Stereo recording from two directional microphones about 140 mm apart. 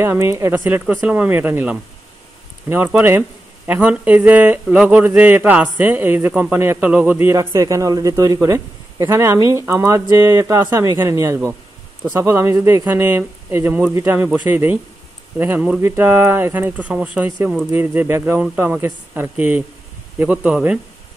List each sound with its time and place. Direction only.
0.0 s speech: 20° right (ahead or behind)